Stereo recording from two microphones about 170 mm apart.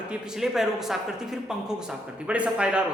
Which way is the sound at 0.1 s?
5° right (ahead or behind).